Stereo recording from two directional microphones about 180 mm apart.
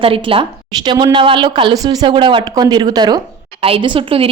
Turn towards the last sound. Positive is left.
turn(degrees=-30)  # may be behind; listen again after turning